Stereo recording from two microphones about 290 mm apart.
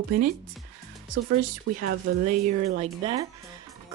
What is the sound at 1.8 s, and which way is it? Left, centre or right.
Speech, right.